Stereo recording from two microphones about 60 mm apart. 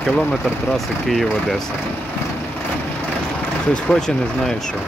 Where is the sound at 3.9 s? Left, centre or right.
Left.